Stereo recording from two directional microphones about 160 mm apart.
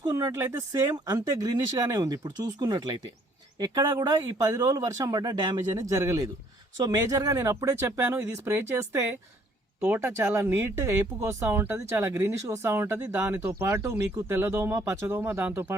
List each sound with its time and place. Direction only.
0.0 s speech: 20° right (ahead or behind)